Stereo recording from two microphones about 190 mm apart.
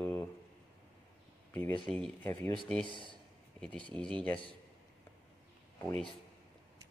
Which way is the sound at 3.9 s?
25° right (ahead or behind).